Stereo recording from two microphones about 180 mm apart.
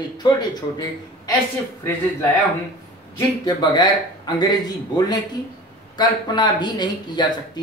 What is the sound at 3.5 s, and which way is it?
Speech, 25° left (ahead or behind).